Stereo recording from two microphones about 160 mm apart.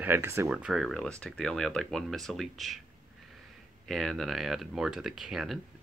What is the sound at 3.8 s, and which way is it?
Speech, centre (ahead or behind).